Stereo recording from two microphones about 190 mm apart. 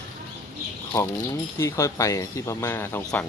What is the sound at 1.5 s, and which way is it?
Speech, 15° left (ahead or behind).